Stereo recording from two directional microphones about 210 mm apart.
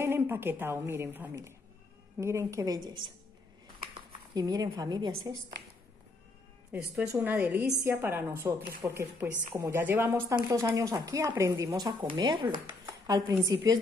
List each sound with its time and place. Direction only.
0.0 s speech: 10° right (ahead or behind)
7.0 s speech: 10° right (ahead or behind)